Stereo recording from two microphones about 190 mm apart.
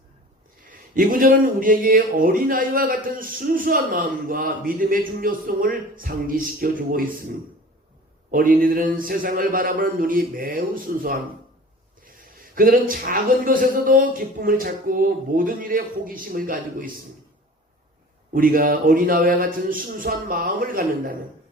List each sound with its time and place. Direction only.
0.9 s speech: 45° right (ahead or behind)
8.3 s speech: 45° right (ahead or behind)
12.5 s speech: 50° right (ahead or behind)
18.3 s speech: 50° right (ahead or behind)